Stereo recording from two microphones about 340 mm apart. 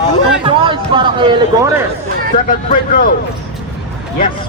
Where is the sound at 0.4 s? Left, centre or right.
Centre.